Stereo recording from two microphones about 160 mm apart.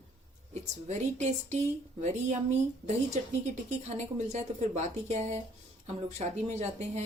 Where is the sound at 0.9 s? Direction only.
45° right (ahead or behind).